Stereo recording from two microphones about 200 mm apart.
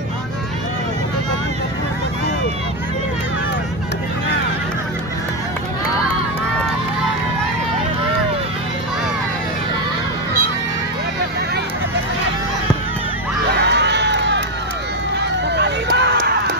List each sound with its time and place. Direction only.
13.6 s crowd: 60° right (ahead or behind)
15.5 s run: 60° right (ahead or behind)